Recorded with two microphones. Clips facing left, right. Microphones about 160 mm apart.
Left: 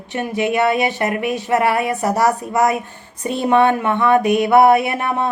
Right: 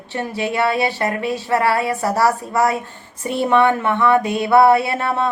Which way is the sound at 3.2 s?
20° left (ahead or behind).